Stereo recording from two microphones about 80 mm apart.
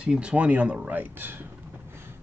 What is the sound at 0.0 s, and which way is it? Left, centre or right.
Speech, centre.